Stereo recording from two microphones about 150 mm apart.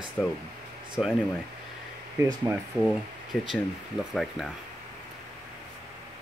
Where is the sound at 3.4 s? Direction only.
Centre (ahead or behind).